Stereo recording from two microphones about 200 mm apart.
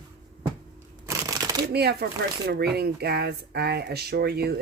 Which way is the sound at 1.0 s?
15° right (ahead or behind).